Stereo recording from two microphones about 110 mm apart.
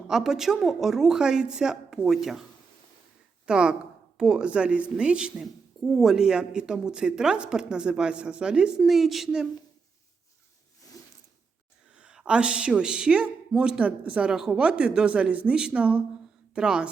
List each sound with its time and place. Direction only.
0.1 s a woman's voice: 5° right (ahead or behind)
3.4 s a woman's voice: 10° right (ahead or behind)
11.0 s mechanisms: 30° left (ahead or behind)
11.9 s a woman's voice: 10° right (ahead or behind)